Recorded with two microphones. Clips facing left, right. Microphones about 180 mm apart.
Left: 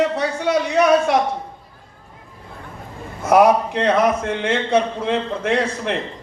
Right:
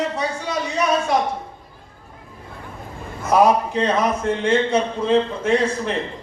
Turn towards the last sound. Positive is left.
turn(degrees=65)  # may be behind; listen again after turning